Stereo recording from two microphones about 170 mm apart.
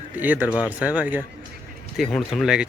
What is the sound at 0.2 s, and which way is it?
A man's voice, 10° right (ahead or behind).